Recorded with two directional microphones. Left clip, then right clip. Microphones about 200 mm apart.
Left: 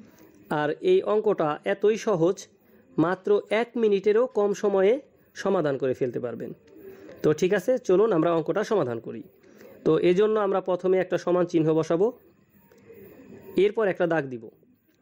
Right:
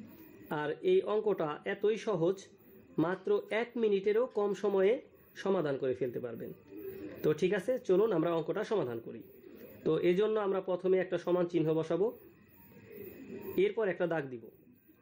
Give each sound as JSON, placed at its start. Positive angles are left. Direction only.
{"t": 0.5, "sound": "speech", "side_deg": 45}
{"t": 13.6, "sound": "speech", "side_deg": 45}